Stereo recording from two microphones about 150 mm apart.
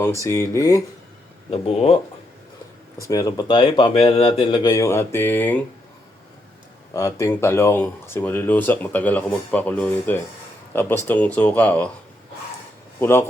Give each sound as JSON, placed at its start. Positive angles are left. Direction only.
{"t": 0.2, "sound": "speech", "side_deg": 20}
{"t": 1.5, "sound": "speech", "side_deg": 45}
{"t": 3.1, "sound": "speech", "side_deg": 25}
{"t": 4.7, "sound": "speech", "side_deg": 20}
{"t": 6.9, "sound": "speech", "side_deg": 20}
{"t": 13.0, "sound": "speech", "side_deg": 15}